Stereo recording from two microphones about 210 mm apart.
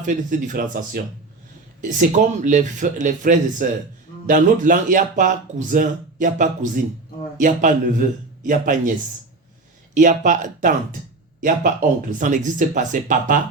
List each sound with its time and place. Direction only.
0.0 s speech: 40° right (ahead or behind)
9.9 s speech: 35° right (ahead or behind)